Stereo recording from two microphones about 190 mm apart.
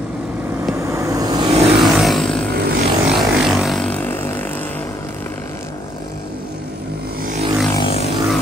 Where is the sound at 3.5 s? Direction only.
Centre (ahead or behind).